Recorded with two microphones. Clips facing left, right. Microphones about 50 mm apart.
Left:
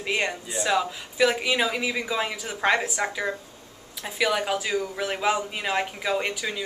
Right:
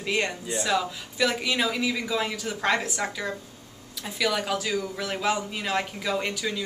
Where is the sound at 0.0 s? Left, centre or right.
Centre.